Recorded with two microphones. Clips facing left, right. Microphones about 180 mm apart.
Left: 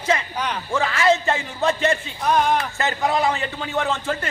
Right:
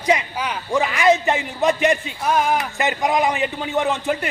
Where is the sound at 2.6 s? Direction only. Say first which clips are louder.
Right 2 dB; 15° right (ahead or behind).